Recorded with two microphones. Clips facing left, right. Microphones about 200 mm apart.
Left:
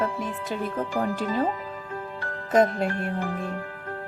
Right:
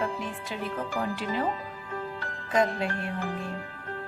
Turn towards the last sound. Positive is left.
turn(degrees=45)  # may be behind; listen again after turning